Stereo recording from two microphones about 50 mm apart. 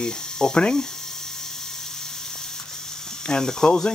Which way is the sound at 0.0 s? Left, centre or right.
Centre.